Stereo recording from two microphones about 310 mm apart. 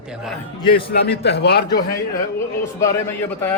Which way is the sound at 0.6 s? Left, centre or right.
Centre.